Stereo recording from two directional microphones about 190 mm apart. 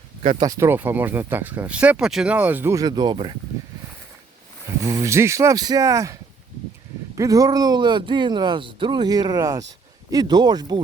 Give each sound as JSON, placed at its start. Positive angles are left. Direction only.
{"t": 0.2, "sound": "speech", "side_deg": -25}
{"t": 4.8, "sound": "speech", "side_deg": -15}
{"t": 7.2, "sound": "speech", "side_deg": -20}